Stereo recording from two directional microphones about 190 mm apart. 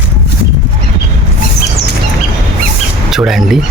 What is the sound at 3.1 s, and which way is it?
Speech, centre (ahead or behind).